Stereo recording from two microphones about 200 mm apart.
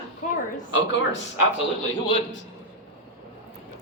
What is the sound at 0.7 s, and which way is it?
Speech, 65° left (ahead or behind).